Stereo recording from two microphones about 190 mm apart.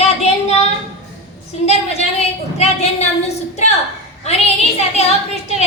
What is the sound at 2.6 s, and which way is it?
A woman's voice, 35° left (ahead or behind).